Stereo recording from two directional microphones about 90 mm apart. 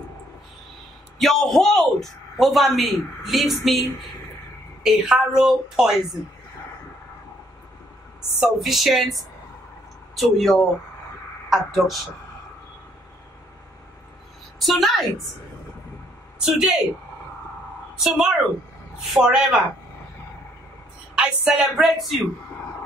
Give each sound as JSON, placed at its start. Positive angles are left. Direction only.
{"t": 1.2, "sound": "a man's voice", "side_deg": 5}
{"t": 4.8, "sound": "a man's voice", "side_deg": -5}
{"t": 8.4, "sound": "a man's voice", "side_deg": 0}
{"t": 14.6, "sound": "a man's voice", "side_deg": 0}
{"t": 16.3, "sound": "a woman's voice", "side_deg": -10}
{"t": 17.9, "sound": "a man's voice", "side_deg": -5}
{"t": 21.1, "sound": "a man's voice", "side_deg": -10}